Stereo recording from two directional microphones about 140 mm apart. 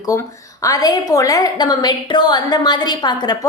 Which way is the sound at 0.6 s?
25° left (ahead or behind).